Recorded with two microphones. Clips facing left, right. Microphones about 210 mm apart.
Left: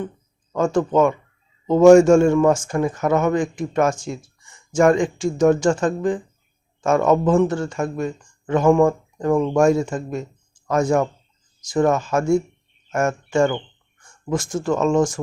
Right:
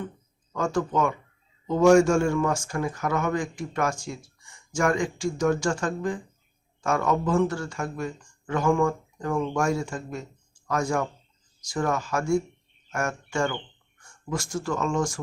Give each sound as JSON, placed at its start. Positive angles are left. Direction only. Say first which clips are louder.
{"t": 0.5, "sound": "speech", "louder": "left 7 dB", "side_deg": 25}
{"t": 9.3, "sound": "speech", "louder": "left 8 dB", "side_deg": 45}
{"t": 9.6, "sound": "speech", "louder": "left 9 dB", "side_deg": 20}